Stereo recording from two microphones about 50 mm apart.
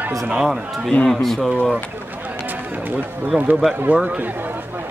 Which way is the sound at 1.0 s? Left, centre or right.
Centre.